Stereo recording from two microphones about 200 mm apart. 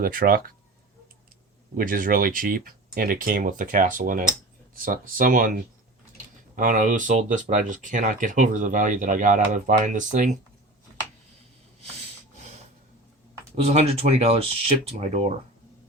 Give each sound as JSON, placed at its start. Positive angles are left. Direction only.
{"t": 0.0, "sound": "speech", "side_deg": -45}
{"t": 1.7, "sound": "speech", "side_deg": -45}
{"t": 6.6, "sound": "speech", "side_deg": -40}
{"t": 13.7, "sound": "speech", "side_deg": -30}